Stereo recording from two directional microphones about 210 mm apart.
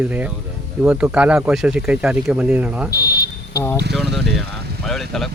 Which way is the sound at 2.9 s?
45° left (ahead or behind).